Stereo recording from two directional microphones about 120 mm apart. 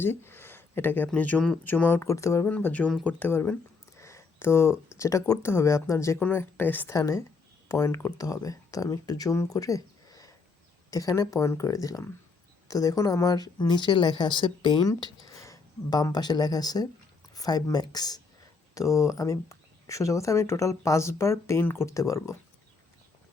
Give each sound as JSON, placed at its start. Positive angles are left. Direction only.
{"t": 0.0, "sound": "speech", "side_deg": 20}
{"t": 2.5, "sound": "speech", "side_deg": 15}
{"t": 14.8, "sound": "speech", "side_deg": 30}